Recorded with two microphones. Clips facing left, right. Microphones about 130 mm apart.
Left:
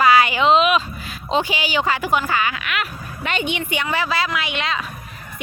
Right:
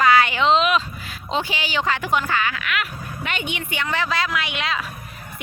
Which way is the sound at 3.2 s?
30° left (ahead or behind).